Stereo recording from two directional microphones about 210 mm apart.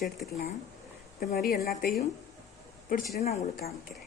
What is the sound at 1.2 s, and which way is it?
Speech, 45° left (ahead or behind).